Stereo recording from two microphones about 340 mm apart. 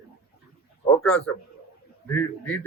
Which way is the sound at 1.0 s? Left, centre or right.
Centre.